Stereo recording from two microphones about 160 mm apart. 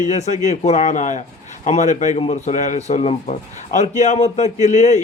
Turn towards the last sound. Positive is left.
turn(degrees=45)  # may be behind; listen again after turning